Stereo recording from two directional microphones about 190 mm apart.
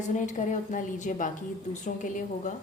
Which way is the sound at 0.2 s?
40° left (ahead or behind).